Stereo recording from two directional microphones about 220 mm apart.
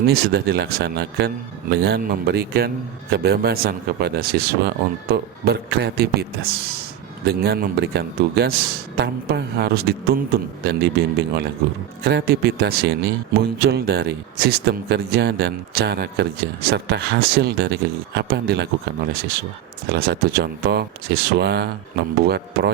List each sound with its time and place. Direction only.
0.1 s speech: 45° right (ahead or behind)